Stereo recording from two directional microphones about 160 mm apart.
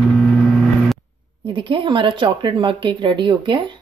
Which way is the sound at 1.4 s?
35° right (ahead or behind).